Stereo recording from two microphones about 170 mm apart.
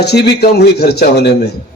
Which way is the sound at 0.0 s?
75° left (ahead or behind).